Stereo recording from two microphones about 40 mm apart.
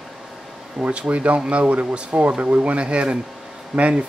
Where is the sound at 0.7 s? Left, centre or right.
Right.